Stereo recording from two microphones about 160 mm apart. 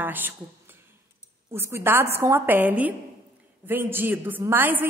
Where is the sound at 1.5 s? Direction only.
15° right (ahead or behind).